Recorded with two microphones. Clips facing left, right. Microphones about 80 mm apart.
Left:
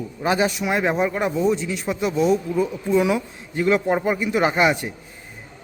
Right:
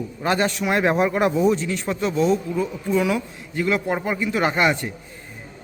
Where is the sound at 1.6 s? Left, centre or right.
Centre.